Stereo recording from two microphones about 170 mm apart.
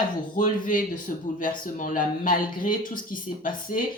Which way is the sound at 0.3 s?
50° left (ahead or behind).